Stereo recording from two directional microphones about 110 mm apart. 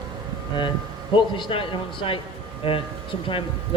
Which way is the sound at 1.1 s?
50° left (ahead or behind).